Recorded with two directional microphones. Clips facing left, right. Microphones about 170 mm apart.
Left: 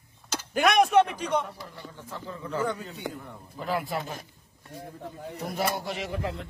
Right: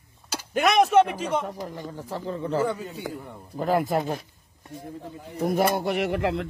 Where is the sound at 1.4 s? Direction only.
45° right (ahead or behind).